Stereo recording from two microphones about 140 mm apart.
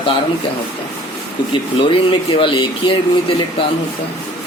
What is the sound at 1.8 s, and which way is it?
Speech, 40° left (ahead or behind).